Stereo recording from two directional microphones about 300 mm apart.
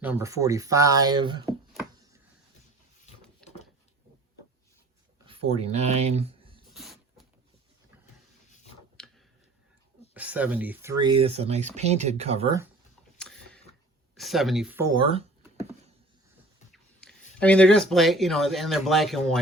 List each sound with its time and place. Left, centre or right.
0.0 s speech: centre
3.4 s a sound: centre
5.5 s speech: right
6.7 s a sound: centre
9.0 s tick-tock: centre
10.2 s speech: centre
13.1 s a sound: centre
14.2 s speech: centre
16.7 s speech: centre